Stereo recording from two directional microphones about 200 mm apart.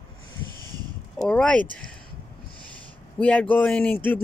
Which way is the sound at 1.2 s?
5° left (ahead or behind).